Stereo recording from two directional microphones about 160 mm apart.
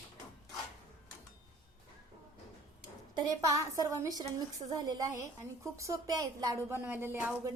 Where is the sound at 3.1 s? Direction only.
25° right (ahead or behind).